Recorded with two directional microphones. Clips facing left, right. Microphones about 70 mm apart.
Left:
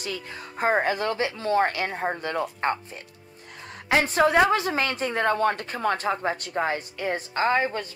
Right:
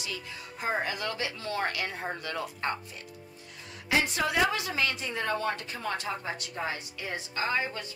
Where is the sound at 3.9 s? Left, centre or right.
Left.